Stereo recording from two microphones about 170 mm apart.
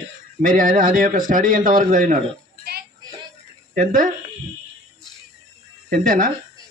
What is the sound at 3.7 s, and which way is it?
Speech, 50° right (ahead or behind).